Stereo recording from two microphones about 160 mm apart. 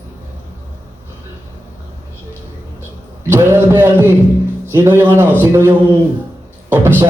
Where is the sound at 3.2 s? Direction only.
15° right (ahead or behind).